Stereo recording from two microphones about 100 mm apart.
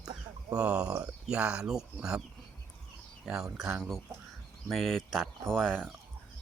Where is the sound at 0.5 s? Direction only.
10° right (ahead or behind).